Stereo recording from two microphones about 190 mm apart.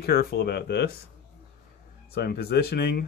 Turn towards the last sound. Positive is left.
turn(degrees=55)  # may be behind; listen again after turning